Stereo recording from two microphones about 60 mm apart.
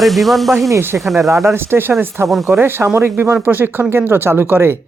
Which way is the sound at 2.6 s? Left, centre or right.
Right.